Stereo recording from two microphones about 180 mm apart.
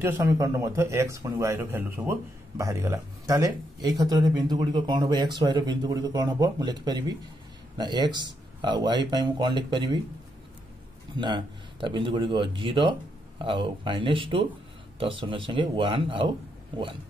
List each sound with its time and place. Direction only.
0.0 s speech: 20° right (ahead or behind)
11.1 s speech: 25° right (ahead or behind)